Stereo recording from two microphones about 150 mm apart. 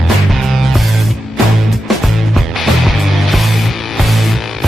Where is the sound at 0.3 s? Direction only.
Centre (ahead or behind).